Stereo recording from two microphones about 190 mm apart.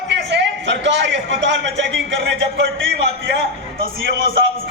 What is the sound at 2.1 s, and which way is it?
Speech, 70° right (ahead or behind).